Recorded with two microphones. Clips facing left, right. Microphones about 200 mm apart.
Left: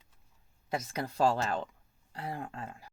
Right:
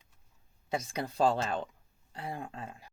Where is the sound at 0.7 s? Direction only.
30° right (ahead or behind).